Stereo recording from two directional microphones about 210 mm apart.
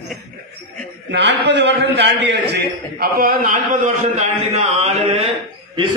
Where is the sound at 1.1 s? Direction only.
55° right (ahead or behind); by 5.3 s 30° right (ahead or behind).